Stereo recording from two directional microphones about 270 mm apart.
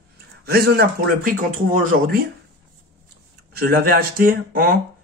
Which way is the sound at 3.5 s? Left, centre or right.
Right.